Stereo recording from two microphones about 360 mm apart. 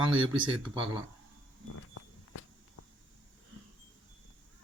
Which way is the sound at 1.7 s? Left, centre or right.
Left.